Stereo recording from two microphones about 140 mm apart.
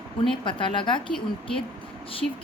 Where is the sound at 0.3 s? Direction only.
35° left (ahead or behind).